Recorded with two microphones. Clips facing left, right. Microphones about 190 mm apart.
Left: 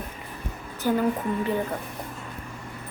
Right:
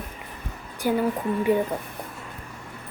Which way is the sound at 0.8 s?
10° right (ahead or behind).